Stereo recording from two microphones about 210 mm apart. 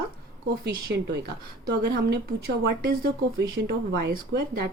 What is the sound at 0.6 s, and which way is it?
Speech, 55° right (ahead or behind).